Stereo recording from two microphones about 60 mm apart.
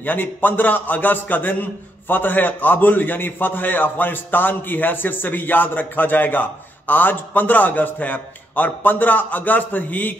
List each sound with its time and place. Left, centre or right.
0.0 s a man's voice: left